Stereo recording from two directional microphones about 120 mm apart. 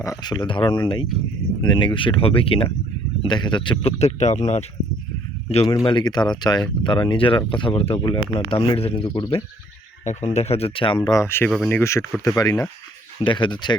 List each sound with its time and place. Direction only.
0.0 s speech: 30° left (ahead or behind)
3.8 s speech: 60° left (ahead or behind)
5.6 s speech: 30° left (ahead or behind); by 9.2 s 50° left (ahead or behind)
10.0 s speech: 75° left (ahead or behind); by 10.9 s 55° left (ahead or behind)
10.9 s speech: 30° left (ahead or behind)
11.4 s speech: 5° left (ahead or behind)
11.7 s speech: 25° left (ahead or behind)
13.2 s speech: 40° left (ahead or behind)